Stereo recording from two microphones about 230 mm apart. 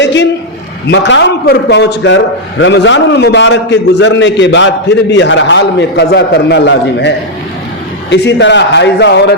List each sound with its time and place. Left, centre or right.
0.0 s a sound: left
0.9 s a man's voice: left
8.1 s a man's voice: left